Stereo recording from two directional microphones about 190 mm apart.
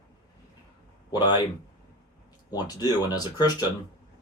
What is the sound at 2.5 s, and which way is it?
Speech, 20° left (ahead or behind).